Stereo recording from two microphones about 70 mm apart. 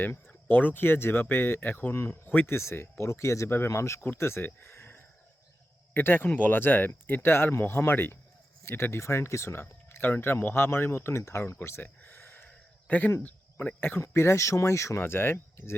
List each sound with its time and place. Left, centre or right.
0.0 s speech: left
2.6 s speech: left
12.5 s a sound: left
13.2 s speech: left
14.0 s speech: left
15.0 s speech: left